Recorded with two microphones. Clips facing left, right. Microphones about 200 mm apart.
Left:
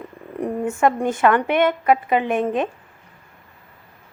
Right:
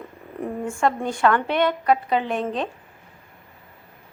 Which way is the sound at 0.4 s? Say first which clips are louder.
Left 4 dB; 20° left (ahead or behind).